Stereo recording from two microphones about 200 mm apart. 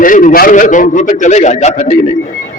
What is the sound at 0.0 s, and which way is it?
A man's voice, 40° left (ahead or behind).